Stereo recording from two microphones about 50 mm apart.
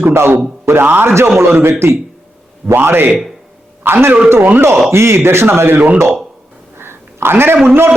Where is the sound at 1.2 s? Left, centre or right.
Right.